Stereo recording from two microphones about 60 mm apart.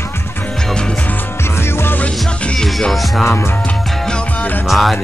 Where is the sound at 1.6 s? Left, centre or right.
Left.